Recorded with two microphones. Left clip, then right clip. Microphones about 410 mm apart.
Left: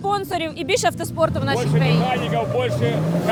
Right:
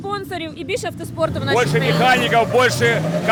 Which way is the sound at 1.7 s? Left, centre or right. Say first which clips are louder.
Right 6 dB; right.